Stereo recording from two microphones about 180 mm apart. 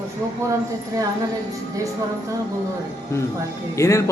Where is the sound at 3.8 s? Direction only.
15° left (ahead or behind).